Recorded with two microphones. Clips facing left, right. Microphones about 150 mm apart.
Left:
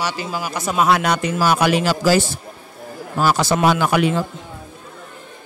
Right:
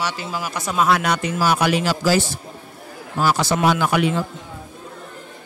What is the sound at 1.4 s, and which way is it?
Speech, 60° left (ahead or behind).